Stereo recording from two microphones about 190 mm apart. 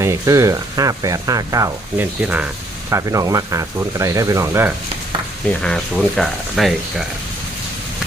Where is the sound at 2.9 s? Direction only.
15° right (ahead or behind).